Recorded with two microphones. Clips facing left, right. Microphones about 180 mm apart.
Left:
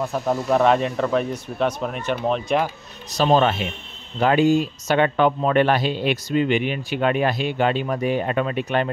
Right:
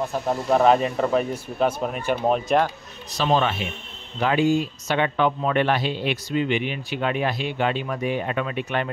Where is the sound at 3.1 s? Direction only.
40° left (ahead or behind).